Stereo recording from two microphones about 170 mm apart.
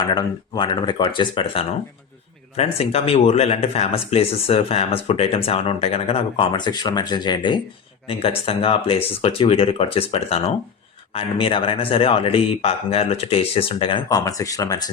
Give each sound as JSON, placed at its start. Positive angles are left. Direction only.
{"t": 0.1, "sound": "speech", "side_deg": 25}